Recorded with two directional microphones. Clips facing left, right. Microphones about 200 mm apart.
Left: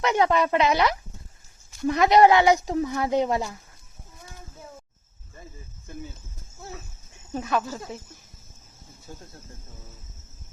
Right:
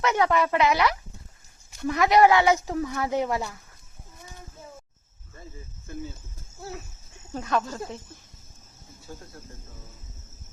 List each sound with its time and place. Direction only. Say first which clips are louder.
0.0 s speech: left 1 dB; 20° left (ahead or behind)
7.3 s speech: even; 10° left (ahead or behind)